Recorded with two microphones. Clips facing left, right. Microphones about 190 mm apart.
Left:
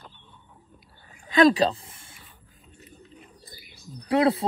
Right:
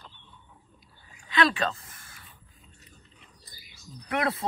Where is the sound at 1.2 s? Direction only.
45° left (ahead or behind); by 2.2 s 30° left (ahead or behind).